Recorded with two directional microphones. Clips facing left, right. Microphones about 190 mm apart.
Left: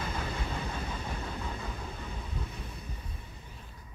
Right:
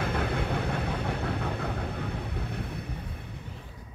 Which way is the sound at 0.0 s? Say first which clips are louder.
Right 7 dB; 65° right (ahead or behind).